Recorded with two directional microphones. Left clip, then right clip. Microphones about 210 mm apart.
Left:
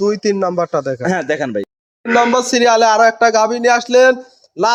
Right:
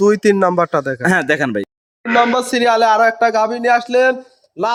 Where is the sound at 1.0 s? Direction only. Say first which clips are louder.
Right 2 dB; 45° right (ahead or behind).